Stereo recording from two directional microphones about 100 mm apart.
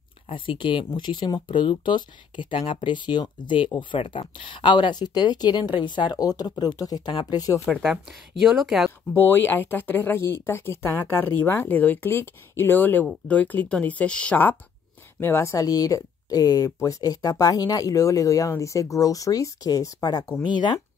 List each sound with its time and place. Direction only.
0.3 s speech: 60° left (ahead or behind); by 7.6 s 40° left (ahead or behind)
7.6 s speech: centre (ahead or behind)
9.1 s speech: 20° left (ahead or behind)
15.5 s speech: 35° left (ahead or behind)